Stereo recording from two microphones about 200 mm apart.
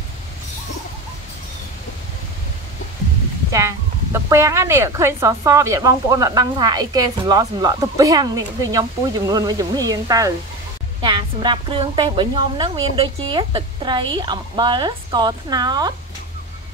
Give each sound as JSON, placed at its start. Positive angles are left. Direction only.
{"t": 3.5, "sound": "a woman's voice", "side_deg": -15}